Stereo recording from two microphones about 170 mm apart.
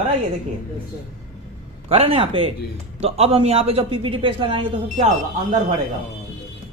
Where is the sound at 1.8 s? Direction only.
35° right (ahead or behind).